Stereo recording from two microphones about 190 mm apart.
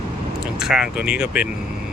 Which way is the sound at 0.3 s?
5° right (ahead or behind).